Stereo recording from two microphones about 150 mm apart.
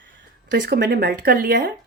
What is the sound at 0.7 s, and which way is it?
Speech, 90° right.